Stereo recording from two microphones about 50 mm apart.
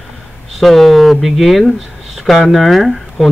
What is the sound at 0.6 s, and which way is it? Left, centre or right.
Speech, centre.